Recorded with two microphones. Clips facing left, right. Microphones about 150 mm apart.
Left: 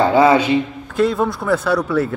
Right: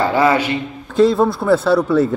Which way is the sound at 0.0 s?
20° left (ahead or behind).